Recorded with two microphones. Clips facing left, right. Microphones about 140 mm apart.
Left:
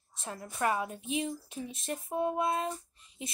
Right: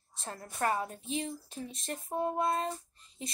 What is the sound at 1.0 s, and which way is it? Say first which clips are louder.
Speech: left 2 dB; 30° right (ahead or behind).